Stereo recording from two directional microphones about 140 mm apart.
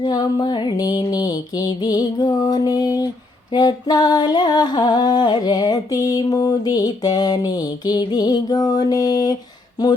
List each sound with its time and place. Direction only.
0.0 s singing: 30° left (ahead or behind)